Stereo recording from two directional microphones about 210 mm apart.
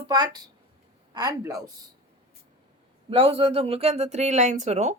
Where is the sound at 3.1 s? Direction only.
25° right (ahead or behind).